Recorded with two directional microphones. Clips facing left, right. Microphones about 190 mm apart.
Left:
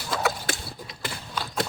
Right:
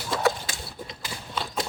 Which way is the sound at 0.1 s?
5° left (ahead or behind).